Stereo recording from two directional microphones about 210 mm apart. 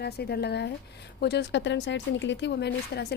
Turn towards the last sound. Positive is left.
turn(degrees=55)  # may be behind; listen again after turning